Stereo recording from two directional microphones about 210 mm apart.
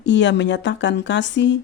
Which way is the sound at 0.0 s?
60° left (ahead or behind).